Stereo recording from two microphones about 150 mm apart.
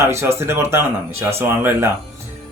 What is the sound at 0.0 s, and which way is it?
Speech, 20° right (ahead or behind).